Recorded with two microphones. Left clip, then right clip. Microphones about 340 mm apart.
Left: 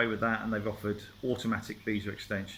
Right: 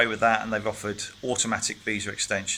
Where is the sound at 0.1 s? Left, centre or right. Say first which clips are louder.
Right 9 dB; centre.